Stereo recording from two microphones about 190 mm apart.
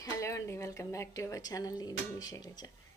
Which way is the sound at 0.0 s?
15° left (ahead or behind).